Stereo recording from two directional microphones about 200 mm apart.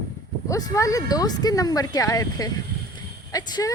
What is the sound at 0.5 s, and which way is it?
Speech, 15° left (ahead or behind).